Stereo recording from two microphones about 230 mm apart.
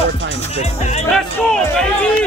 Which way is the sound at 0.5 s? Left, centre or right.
Left.